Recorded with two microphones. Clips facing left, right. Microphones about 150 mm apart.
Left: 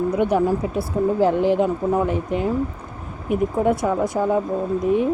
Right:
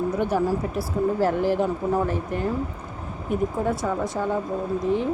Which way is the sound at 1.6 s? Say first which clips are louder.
Left 3 dB; 15° left (ahead or behind).